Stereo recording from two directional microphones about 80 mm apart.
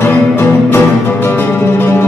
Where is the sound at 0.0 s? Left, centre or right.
Left.